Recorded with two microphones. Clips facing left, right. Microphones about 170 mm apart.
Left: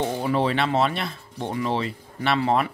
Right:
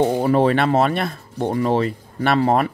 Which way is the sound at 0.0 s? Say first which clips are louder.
Right 7 dB; 45° right (ahead or behind).